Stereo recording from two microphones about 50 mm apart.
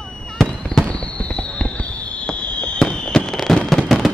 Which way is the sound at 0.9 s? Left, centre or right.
Left.